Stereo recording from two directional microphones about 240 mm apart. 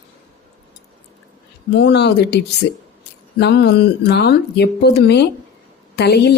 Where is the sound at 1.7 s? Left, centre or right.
Left.